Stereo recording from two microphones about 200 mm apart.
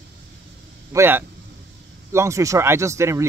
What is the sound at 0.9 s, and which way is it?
Speech, 10° right (ahead or behind).